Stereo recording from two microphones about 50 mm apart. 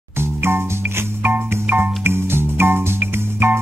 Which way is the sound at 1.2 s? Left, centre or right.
Right.